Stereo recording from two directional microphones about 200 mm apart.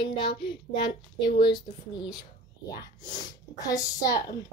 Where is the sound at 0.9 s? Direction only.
50° left (ahead or behind).